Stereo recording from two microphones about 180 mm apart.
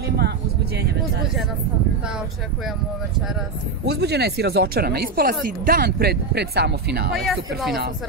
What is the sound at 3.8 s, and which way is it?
Speech, 65° right (ahead or behind).